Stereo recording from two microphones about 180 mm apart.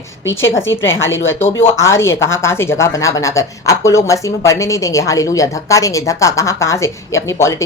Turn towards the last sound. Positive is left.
turn(degrees=15)  # may be behind; listen again after turning